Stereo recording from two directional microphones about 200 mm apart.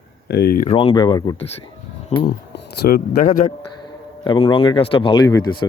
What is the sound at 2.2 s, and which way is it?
A man's voice, 50° left (ahead or behind).